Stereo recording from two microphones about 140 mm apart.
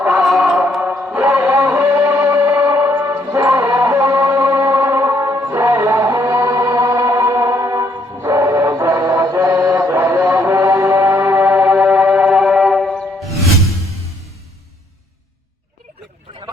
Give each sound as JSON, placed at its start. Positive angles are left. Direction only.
{"t": 0.0, "sound": "music", "side_deg": -5}
{"t": 9.7, "sound": "mantra", "side_deg": -15}